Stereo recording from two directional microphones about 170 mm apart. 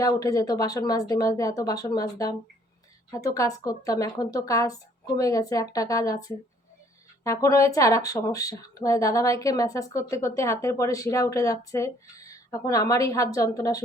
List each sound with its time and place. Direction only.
0.0 s speech: 20° left (ahead or behind)